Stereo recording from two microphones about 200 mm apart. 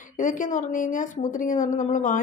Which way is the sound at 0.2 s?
40° left (ahead or behind).